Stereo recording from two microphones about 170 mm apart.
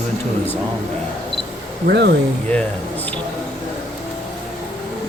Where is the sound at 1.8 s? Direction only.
75° right (ahead or behind).